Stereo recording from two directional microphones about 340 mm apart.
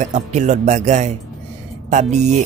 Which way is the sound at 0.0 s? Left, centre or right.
Right.